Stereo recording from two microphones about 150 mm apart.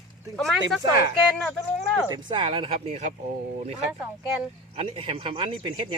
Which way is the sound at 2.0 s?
30° right (ahead or behind).